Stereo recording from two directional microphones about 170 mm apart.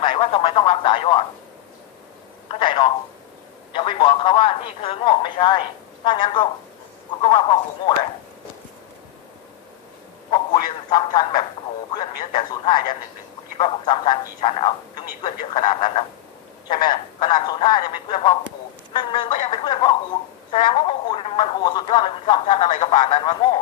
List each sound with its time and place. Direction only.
0.0 s speech: 30° left (ahead or behind)
2.5 s telephone: 30° left (ahead or behind)
3.7 s speech: 30° left (ahead or behind)
10.3 s speech: 25° left (ahead or behind)